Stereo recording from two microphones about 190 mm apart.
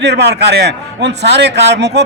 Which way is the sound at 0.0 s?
60° right (ahead or behind).